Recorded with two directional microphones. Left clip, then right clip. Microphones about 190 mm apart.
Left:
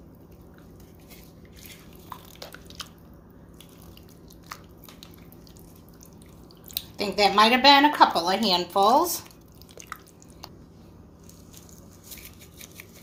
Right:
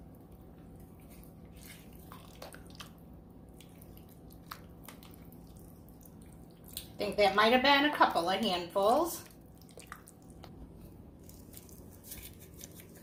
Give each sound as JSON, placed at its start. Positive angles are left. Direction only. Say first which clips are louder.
{"t": 7.0, "sound": "speech", "louder": "left 7 dB", "side_deg": 50}